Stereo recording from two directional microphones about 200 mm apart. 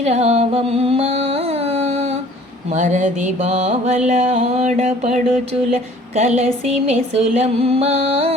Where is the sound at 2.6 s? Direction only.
35° right (ahead or behind).